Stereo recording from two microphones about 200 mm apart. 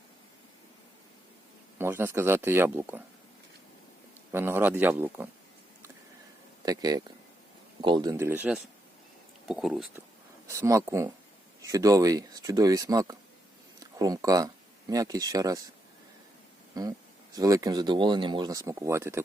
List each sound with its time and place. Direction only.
1.8 s speech: 10° right (ahead or behind)
4.3 s speech: 10° right (ahead or behind)
6.7 s speech: 20° right (ahead or behind); by 10.0 s centre (ahead or behind)
10.4 s speech: 15° right (ahead or behind)
16.7 s speech: 20° right (ahead or behind)